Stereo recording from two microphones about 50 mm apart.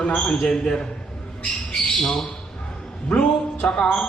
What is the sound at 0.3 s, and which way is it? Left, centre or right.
Speech, centre.